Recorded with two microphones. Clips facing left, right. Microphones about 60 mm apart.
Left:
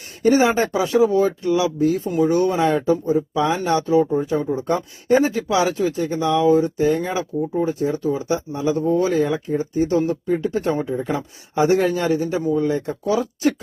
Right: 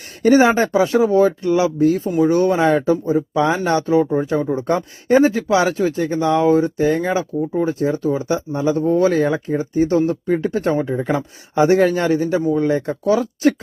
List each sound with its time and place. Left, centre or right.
0.2 s speech: right
2.0 s speech: right
2.3 s speech: right
4.6 s speech: right